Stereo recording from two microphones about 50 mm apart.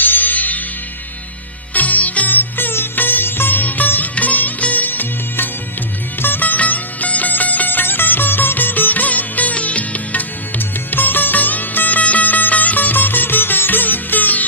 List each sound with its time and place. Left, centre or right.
0.0 s music: left
1.7 s music: left